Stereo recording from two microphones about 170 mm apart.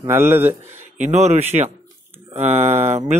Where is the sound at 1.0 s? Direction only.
40° right (ahead or behind).